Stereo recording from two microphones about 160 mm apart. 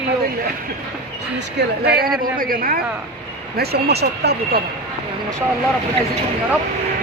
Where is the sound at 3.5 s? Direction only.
80° right.